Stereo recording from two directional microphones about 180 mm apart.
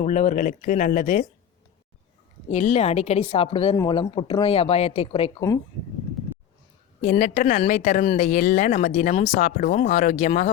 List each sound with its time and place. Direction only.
0.0 s speech: 40° left (ahead or behind)
2.5 s speech: 40° left (ahead or behind)
3.8 s speech: 20° left (ahead or behind)
7.0 s speech: 40° left (ahead or behind)
9.6 s speech: 50° left (ahead or behind)